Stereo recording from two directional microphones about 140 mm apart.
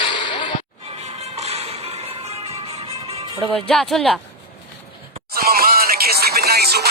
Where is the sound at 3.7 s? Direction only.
5° left (ahead or behind).